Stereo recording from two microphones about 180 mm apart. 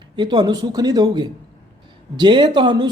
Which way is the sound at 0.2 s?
25° right (ahead or behind).